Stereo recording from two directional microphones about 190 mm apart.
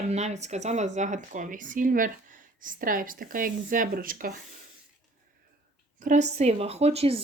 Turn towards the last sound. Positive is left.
turn(degrees=-30)  # may be behind; listen again after turning